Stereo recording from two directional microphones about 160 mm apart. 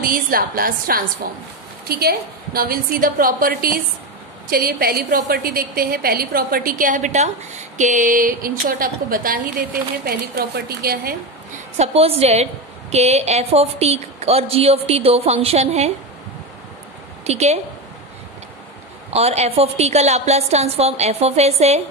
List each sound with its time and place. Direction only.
0.0 s a woman's voice: 65° right (ahead or behind)
10.0 s a woman's voice: 80° right
11.7 s a woman's voice: 40° right (ahead or behind)
17.2 s a woman's voice: 45° right (ahead or behind)
19.1 s a woman's voice: 40° right (ahead or behind)